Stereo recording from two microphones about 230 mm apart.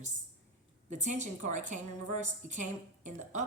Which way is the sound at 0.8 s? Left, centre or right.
Right.